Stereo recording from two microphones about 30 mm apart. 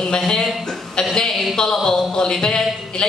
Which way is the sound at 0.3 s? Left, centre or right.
Left.